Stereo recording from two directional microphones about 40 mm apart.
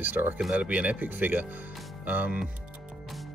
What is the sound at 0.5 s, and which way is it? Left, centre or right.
Speech, right.